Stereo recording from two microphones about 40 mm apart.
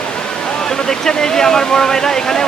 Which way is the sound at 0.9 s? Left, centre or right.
Centre.